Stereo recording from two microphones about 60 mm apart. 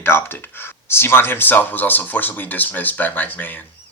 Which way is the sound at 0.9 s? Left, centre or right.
Left.